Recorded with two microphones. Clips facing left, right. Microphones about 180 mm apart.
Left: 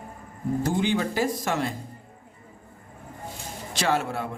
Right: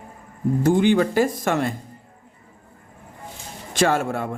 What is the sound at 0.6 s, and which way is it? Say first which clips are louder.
Speech: right 8 dB; 55° right (ahead or behind).